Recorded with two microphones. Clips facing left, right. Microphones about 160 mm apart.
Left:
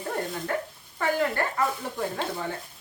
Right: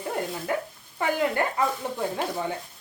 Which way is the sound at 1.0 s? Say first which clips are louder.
Even; 15° right (ahead or behind).